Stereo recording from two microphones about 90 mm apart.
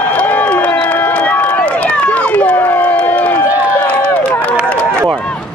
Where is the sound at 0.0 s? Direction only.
15° left (ahead or behind).